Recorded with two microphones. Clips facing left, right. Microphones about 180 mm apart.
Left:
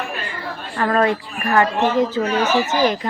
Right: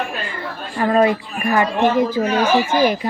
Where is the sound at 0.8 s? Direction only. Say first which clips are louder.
Right 2 dB; 10° right (ahead or behind).